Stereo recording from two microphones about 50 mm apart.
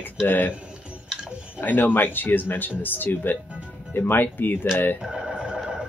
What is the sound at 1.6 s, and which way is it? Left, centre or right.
Speech, left.